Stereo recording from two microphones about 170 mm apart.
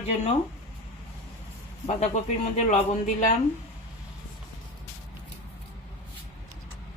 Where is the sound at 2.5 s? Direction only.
45° left (ahead or behind).